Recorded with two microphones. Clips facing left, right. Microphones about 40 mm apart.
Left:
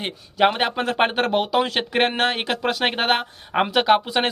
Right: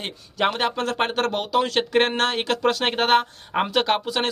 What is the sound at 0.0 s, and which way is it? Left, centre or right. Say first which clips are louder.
Speech: left 4 dB; centre.